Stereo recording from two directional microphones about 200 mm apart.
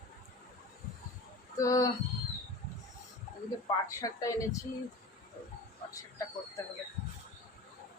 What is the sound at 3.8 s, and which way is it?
Speech, 15° left (ahead or behind).